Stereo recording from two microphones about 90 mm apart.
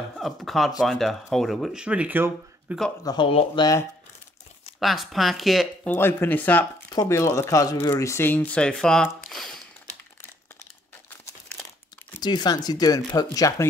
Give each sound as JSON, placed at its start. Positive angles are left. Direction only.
{"t": 0.2, "sound": "speech", "side_deg": 0}
{"t": 3.0, "sound": "speech", "side_deg": 45}
{"t": 3.3, "sound": "speech", "side_deg": 90}
{"t": 4.7, "sound": "speech", "side_deg": 0}
{"t": 5.9, "sound": "speech", "side_deg": 25}
{"t": 6.9, "sound": "speech", "side_deg": 40}
{"t": 7.9, "sound": "speech", "side_deg": 30}
{"t": 8.5, "sound": "speech", "side_deg": 10}
{"t": 12.2, "sound": "speech", "side_deg": 50}